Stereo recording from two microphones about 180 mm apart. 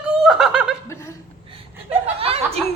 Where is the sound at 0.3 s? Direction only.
5° right (ahead or behind).